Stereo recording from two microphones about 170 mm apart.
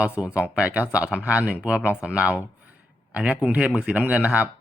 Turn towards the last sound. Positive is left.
turn(degrees=-5)  # may be behind; listen again after turning